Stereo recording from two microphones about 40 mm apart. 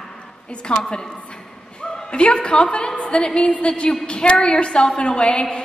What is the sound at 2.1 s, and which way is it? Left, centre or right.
A woman's voice, left.